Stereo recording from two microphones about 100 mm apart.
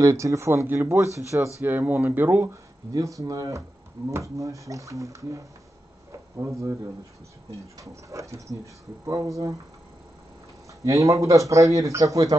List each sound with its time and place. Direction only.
0.0 s speech: 30° right (ahead or behind)
1.6 s speech: 20° right (ahead or behind)
2.9 s a man's voice: 35° right (ahead or behind)
6.1 s a sound: 30° right (ahead or behind)
7.8 s a man's voice: 30° right (ahead or behind)
10.8 s a man's voice: 30° right (ahead or behind)